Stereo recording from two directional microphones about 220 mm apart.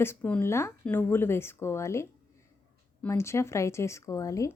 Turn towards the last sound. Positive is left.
turn(degrees=15)  # may be behind; listen again after turning